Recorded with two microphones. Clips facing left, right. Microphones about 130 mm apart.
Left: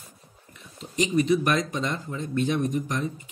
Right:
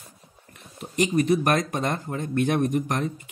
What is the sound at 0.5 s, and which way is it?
Speech, 55° right (ahead or behind).